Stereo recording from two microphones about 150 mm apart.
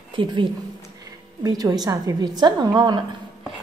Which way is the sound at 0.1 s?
35° right (ahead or behind).